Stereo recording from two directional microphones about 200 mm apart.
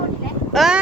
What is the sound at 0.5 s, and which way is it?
Speech, centre (ahead or behind).